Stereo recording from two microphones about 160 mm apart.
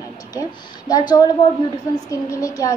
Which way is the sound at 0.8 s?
25° left (ahead or behind).